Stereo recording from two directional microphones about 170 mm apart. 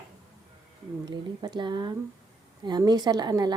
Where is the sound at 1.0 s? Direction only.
25° right (ahead or behind).